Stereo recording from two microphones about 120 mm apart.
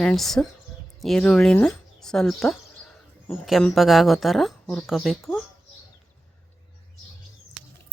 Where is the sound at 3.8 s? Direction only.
Centre (ahead or behind).